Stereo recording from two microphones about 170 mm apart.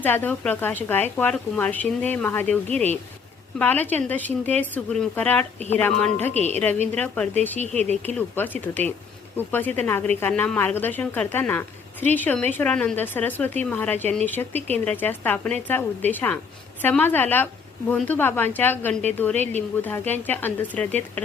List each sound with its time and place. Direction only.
0.0 s a woman's voice: 10° left (ahead or behind)
5.5 s speech: 40° right (ahead or behind)
5.8 s a woman's voice: 5° left (ahead or behind)
6.3 s speech: 40° right (ahead or behind)
6.9 s a woman's voice: 10° left (ahead or behind)
7.6 s speech: 40° right (ahead or behind)
8.0 s a woman's voice: 10° left (ahead or behind)